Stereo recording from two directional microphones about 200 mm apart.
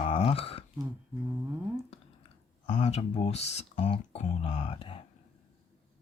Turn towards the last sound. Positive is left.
turn(degrees=30)  # may be behind; listen again after turning